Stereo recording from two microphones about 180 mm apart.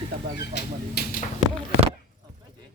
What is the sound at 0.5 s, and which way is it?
Speech, 60° left (ahead or behind).